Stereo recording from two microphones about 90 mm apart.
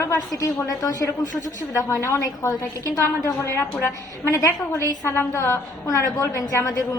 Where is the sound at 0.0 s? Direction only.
35° left (ahead or behind).